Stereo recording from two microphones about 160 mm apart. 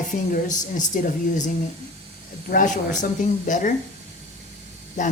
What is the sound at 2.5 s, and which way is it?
A woman's voice, 55° left (ahead or behind).